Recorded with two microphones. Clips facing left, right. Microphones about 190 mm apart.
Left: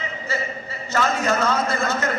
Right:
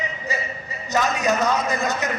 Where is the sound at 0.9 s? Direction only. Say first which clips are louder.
Even; 15° right (ahead or behind).